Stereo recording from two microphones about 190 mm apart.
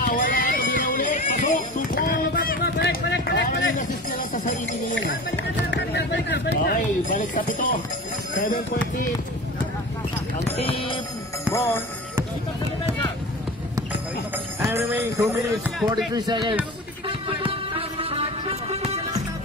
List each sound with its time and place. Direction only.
0.0 s a sound: 50° left (ahead or behind); by 6.5 s 65° left (ahead or behind)
6.6 s speech: 45° left (ahead or behind)
10.5 s speech: 30° left (ahead or behind)
11.5 s speech: 10° left (ahead or behind)
14.6 s speech: 10° right (ahead or behind)
17.4 s music: 30° right (ahead or behind)